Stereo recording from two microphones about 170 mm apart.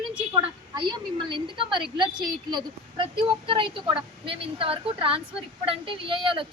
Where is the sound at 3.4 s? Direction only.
30° right (ahead or behind).